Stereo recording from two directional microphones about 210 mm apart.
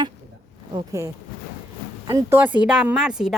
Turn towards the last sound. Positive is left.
turn(degrees=0)  # may be behind; listen again after turning